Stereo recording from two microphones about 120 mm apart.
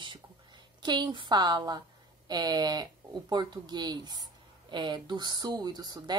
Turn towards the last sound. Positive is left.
turn(degrees=-35)  # may be behind; listen again after turning